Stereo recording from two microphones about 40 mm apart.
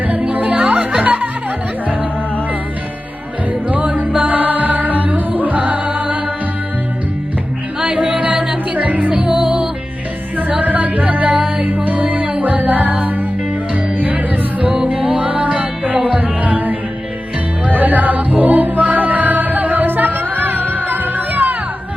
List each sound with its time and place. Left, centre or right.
0.1 s music: right
3.7 s music: right
7.8 s music: right
8.7 s music: right
9.3 s music: right
10.6 s music: right